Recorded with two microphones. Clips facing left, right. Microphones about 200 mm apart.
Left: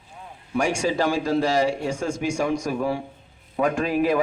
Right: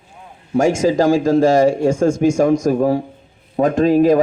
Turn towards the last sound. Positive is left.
turn(degrees=-40)  # may be behind; listen again after turning